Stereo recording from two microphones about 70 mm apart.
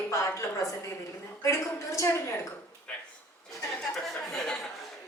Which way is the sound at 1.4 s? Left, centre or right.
Left.